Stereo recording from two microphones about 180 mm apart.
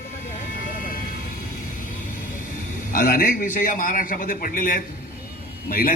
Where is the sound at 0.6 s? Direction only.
50° left (ahead or behind).